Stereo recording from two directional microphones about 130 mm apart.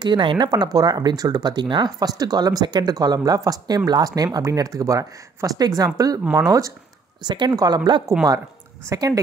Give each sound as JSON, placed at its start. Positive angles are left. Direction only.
{"t": 0.0, "sound": "speech", "side_deg": -40}